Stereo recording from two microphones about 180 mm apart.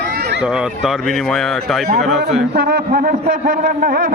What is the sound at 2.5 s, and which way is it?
A man's voice, 55° right (ahead or behind).